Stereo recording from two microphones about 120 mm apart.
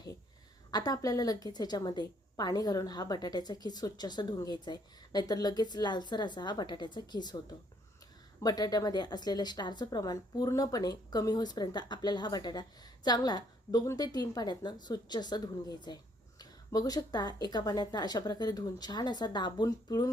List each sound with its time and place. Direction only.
0.7 s a woman's voice: 35° left (ahead or behind)
8.4 s a woman's voice: 35° left (ahead or behind)